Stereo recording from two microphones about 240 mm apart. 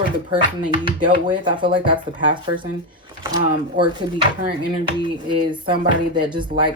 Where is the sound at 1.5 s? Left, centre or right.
Centre.